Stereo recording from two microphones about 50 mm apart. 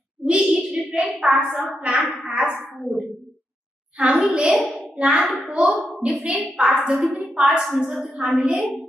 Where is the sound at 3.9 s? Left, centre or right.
Centre.